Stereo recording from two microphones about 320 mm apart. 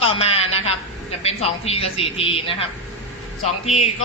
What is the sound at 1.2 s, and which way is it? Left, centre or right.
A man's voice, centre.